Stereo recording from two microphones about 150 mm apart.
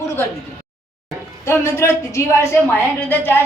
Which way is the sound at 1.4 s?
15° left (ahead or behind).